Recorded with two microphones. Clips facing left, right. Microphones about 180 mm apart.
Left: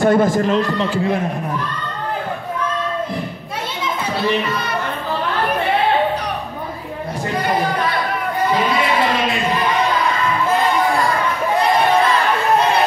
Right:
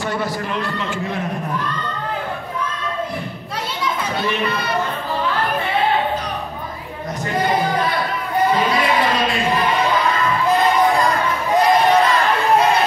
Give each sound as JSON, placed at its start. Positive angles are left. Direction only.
{"t": 0.0, "sound": "a man's voice", "side_deg": 50}
{"t": 0.6, "sound": "a man's voice", "side_deg": 40}